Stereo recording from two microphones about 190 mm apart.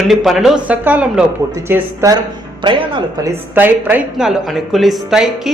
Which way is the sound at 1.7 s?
20° right (ahead or behind).